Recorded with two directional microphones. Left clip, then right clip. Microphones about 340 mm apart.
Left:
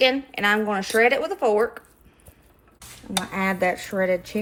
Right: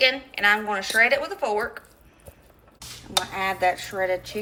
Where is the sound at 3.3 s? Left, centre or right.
Left.